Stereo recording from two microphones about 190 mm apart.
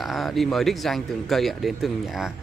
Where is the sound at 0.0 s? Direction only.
Centre (ahead or behind).